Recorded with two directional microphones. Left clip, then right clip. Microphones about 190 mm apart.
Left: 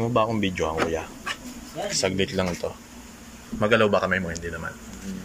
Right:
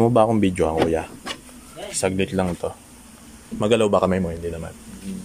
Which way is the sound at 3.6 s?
25° right (ahead or behind).